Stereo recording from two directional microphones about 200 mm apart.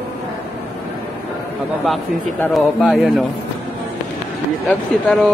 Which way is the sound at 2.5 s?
Centre (ahead or behind).